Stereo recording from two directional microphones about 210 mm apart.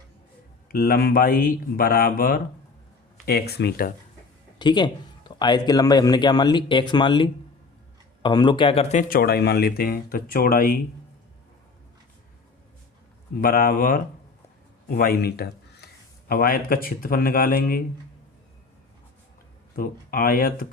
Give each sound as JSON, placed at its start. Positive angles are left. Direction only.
{"t": 0.7, "sound": "speech", "side_deg": 45}
{"t": 4.5, "sound": "a man's voice", "side_deg": 20}
{"t": 13.4, "sound": "speech", "side_deg": 45}
{"t": 19.7, "sound": "speech", "side_deg": 45}